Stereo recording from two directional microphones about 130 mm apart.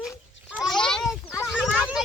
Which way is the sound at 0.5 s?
Centre (ahead or behind).